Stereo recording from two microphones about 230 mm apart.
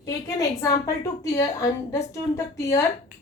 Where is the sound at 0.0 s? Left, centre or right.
Centre.